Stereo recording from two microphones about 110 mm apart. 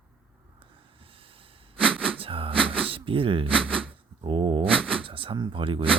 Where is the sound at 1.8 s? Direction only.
5° left (ahead or behind).